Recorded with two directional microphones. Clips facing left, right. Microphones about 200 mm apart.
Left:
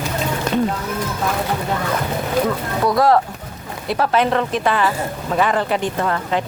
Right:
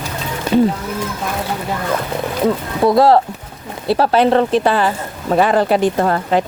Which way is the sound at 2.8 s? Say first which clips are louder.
Right 4 dB; 30° right (ahead or behind).